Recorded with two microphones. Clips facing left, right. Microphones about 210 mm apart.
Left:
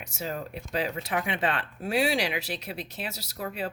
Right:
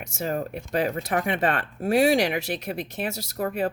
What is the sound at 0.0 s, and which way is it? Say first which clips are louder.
Speech: right 6 dB; 50° right (ahead or behind).